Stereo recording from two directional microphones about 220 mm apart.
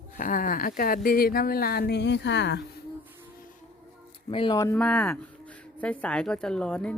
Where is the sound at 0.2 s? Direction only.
40° left (ahead or behind).